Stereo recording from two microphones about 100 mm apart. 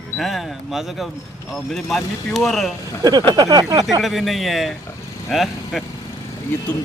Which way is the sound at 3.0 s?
40° right (ahead or behind).